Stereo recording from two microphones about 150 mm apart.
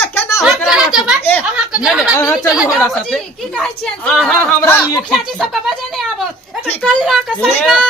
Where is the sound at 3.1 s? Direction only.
5° left (ahead or behind).